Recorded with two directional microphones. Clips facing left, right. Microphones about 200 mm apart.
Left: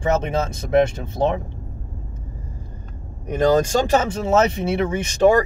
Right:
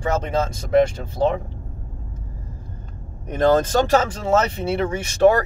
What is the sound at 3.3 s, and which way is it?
Speech, 10° left (ahead or behind).